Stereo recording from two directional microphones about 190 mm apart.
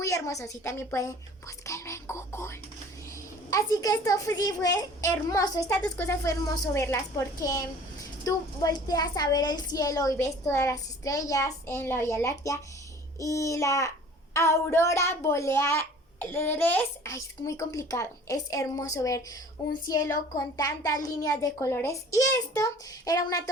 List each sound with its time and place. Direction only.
0.0 s a woman's voice: 15° left (ahead or behind)
19.6 s child singing: 20° left (ahead or behind)
20.3 s a woman's voice: 20° left (ahead or behind)